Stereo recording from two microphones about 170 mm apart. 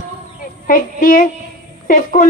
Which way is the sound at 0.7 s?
55° left (ahead or behind).